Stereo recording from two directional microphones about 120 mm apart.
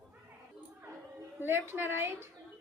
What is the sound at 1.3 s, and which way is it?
Speech, 20° right (ahead or behind).